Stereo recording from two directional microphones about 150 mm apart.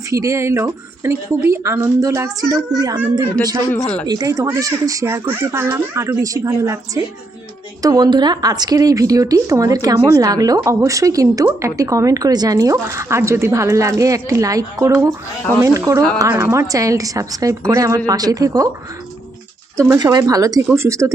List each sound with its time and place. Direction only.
0.1 s a woman's voice: 20° right (ahead or behind)
3.7 s speech: 10° left (ahead or behind)
4.0 s a woman's voice: 25° right (ahead or behind)
19.7 s a woman's voice: 20° right (ahead or behind)